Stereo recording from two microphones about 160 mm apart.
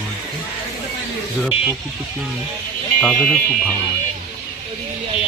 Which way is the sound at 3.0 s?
5° left (ahead or behind).